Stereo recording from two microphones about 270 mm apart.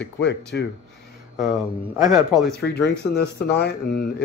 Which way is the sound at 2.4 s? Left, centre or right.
Left.